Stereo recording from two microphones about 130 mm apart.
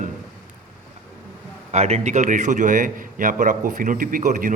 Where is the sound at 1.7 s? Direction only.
55° right (ahead or behind).